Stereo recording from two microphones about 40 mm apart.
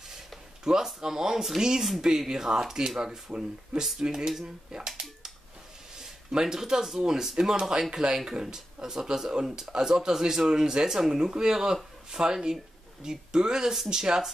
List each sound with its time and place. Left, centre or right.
0.7 s speech: centre